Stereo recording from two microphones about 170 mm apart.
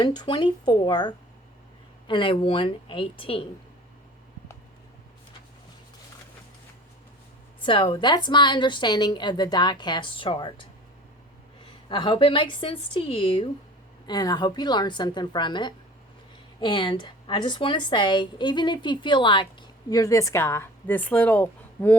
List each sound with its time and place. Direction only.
0.0 s a woman's voice: 25° left (ahead or behind)
7.6 s a woman's voice: 30° left (ahead or behind); by 21.9 s 10° left (ahead or behind)